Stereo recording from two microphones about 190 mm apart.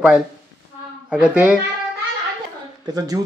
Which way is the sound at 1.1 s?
5° right (ahead or behind).